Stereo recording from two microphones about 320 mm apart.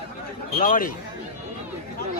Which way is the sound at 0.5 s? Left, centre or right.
Left.